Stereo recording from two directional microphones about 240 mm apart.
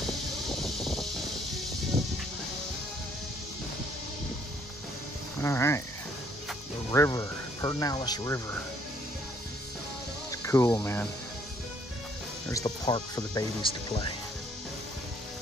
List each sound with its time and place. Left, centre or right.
0.6 s a sound: centre
5.4 s speech: centre
6.9 s speech: centre
10.3 s speech: centre
12.4 s speech: centre